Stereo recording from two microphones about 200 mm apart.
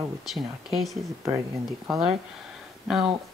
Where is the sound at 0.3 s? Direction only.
Centre (ahead or behind).